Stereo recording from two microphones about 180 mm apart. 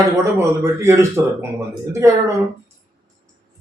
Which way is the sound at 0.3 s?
15° right (ahead or behind).